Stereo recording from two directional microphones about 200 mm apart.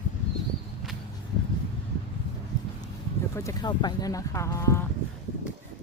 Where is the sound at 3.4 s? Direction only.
20° left (ahead or behind).